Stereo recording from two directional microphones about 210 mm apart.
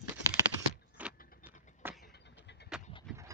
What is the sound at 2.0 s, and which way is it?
Vehicle, 50° left (ahead or behind).